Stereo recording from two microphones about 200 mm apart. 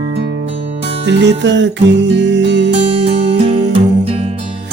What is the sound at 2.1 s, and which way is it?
Music, 60° right (ahead or behind).